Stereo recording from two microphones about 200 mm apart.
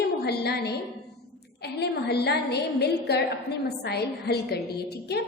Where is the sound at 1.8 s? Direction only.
55° left (ahead or behind).